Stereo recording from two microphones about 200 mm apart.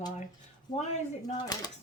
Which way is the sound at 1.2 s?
20° left (ahead or behind).